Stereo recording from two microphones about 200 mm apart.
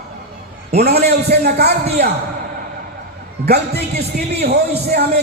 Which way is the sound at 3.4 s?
55° right (ahead or behind).